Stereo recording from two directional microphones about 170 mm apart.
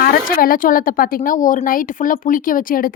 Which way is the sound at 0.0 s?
60° left (ahead or behind).